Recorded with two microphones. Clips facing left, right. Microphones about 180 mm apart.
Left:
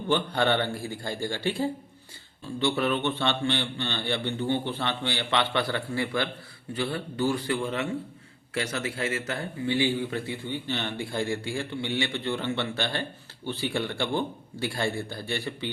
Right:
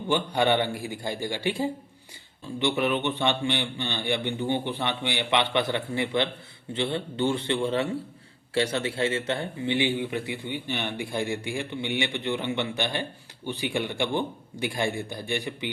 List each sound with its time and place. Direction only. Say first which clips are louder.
0.1 s a man's voice: right 1 dB; 15° right (ahead or behind)